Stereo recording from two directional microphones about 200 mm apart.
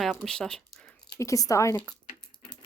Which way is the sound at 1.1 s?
15° left (ahead or behind).